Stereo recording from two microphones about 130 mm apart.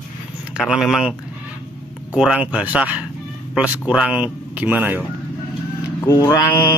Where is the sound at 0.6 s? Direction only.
5° right (ahead or behind).